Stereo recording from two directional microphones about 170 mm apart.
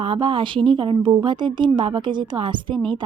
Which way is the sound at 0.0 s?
30° right (ahead or behind).